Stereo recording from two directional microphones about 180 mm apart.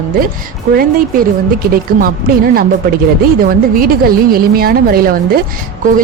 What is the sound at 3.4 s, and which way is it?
A woman's voice, 55° right (ahead or behind).